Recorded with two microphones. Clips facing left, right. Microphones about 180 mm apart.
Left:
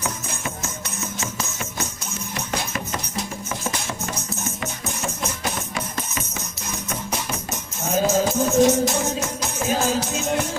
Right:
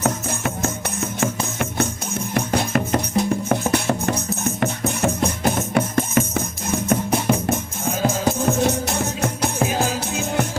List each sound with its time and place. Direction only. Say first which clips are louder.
0.3 s music: right 7 dB; 60° right (ahead or behind)